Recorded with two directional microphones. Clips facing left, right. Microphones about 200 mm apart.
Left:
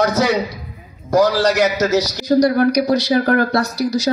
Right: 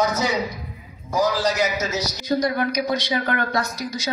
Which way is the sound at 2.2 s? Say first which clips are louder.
Left 8 dB; 40° left (ahead or behind).